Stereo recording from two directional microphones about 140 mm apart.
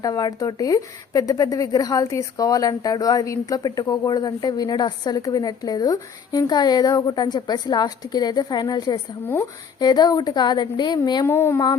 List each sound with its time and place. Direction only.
0.0 s speech: 25° left (ahead or behind)
11.3 s speech: 15° left (ahead or behind)